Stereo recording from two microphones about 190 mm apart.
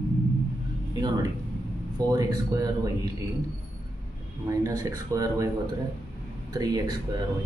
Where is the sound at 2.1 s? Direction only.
20° right (ahead or behind).